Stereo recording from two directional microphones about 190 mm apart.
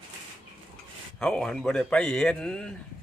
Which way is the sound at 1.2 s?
5° left (ahead or behind).